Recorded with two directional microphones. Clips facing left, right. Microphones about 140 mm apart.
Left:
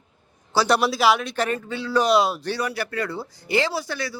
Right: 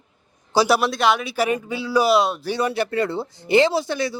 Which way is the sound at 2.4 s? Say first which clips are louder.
Right 4 dB; 25° right (ahead or behind).